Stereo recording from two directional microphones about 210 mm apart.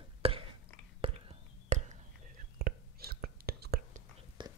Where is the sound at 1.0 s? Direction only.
30° right (ahead or behind).